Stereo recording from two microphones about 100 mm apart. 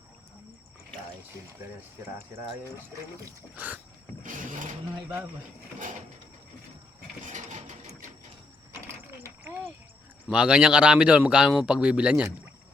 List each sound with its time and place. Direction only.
3.5 s speech: 15° right (ahead or behind)
5.0 s speech: 20° right (ahead or behind)
8.9 s a sound: 25° right (ahead or behind)
10.2 s speech: 10° right (ahead or behind)